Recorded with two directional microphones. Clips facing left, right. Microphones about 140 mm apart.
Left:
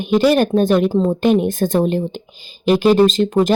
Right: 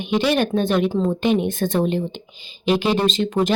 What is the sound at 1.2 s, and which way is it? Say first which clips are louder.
A woman's voice: left 4 dB; 45° left (ahead or behind).